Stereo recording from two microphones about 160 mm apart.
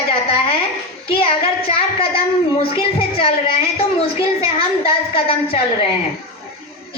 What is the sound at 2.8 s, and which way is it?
A woman's voice, 35° left (ahead or behind).